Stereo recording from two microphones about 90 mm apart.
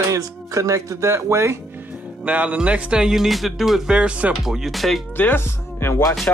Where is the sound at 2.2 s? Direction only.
15° right (ahead or behind); by 5.0 s centre (ahead or behind).